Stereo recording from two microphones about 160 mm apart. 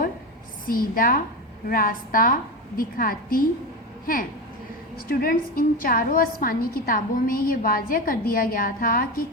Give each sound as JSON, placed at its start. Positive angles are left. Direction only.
{"t": 0.7, "sound": "a woman's voice", "side_deg": 60}